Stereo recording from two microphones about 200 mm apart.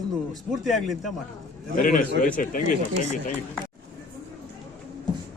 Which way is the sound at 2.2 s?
40° left (ahead or behind).